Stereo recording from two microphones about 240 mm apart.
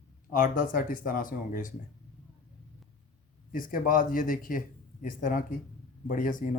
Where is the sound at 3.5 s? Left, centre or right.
Left.